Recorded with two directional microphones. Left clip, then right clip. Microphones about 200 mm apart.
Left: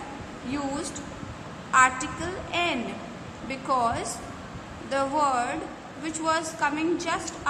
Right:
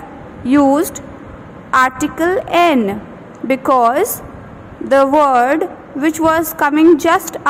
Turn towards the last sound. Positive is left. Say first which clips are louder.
# right 16 dB
turn(degrees=-45)  # may be behind; listen again after turning